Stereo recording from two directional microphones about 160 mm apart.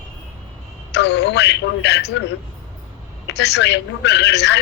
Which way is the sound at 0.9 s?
90° left.